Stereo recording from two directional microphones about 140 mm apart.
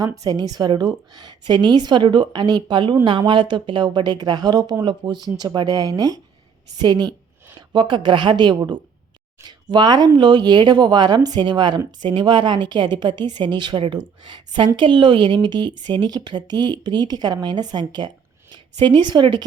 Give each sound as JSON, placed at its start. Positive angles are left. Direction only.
{"t": 0.5, "sound": "a woman's voice", "side_deg": -30}